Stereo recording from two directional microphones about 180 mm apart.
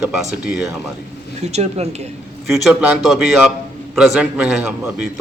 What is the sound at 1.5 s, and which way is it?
Speech, 35° right (ahead or behind).